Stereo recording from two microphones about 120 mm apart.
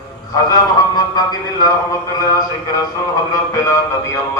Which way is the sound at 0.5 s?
35° left (ahead or behind).